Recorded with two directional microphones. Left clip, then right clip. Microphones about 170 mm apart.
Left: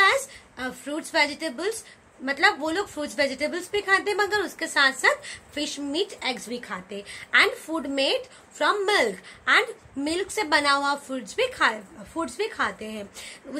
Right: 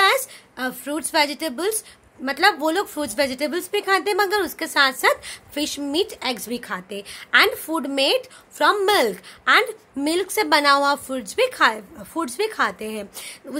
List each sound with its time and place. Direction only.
0.0 s a woman's voice: 55° right (ahead or behind)